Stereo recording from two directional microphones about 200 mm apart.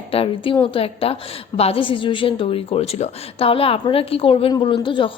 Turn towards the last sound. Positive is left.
turn(degrees=25)  # may be behind; listen again after turning